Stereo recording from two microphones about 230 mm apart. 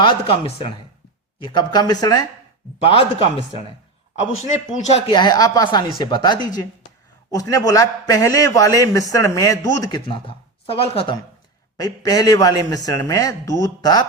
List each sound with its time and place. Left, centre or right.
0.0 s a man's voice: left
4.9 s a man's voice: left